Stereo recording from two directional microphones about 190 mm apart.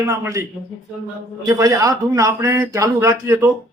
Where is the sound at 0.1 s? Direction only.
15° right (ahead or behind).